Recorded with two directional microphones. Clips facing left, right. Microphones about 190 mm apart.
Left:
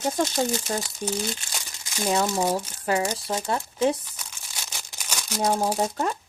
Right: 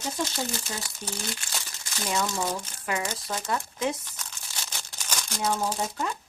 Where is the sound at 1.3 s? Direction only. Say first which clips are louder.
Left 2 dB; 15° left (ahead or behind).